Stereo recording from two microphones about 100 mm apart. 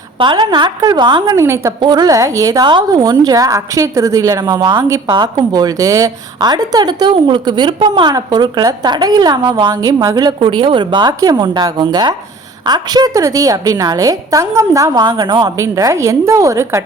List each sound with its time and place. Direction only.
0.2 s a woman's voice: 50° right (ahead or behind)
1.4 s a woman's voice: 30° right (ahead or behind)
1.8 s a woman's voice: 45° right (ahead or behind)
8.1 s a woman's voice: 45° right (ahead or behind)
9.7 s a woman's voice: 35° right (ahead or behind)
15.5 s a woman's voice: 30° right (ahead or behind)